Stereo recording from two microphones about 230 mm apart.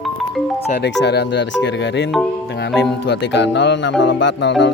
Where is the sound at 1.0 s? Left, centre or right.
Left.